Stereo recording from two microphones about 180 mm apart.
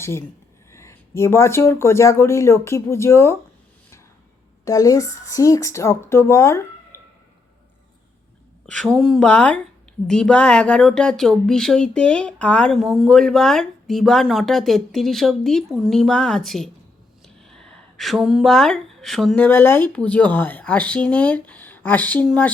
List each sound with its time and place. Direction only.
0.0 s speech: 15° left (ahead or behind)
4.6 s speech: 20° left (ahead or behind)
8.6 s speech: 5° left (ahead or behind)